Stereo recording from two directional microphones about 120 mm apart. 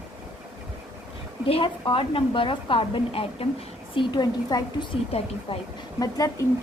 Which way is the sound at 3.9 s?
35° left (ahead or behind).